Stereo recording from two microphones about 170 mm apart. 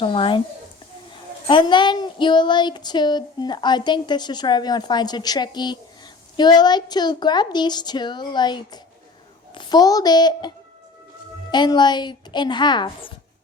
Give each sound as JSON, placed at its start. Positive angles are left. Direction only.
{"t": 0.0, "sound": "speech", "side_deg": 30}
{"t": 1.5, "sound": "speech", "side_deg": 30}
{"t": 11.5, "sound": "speech", "side_deg": 25}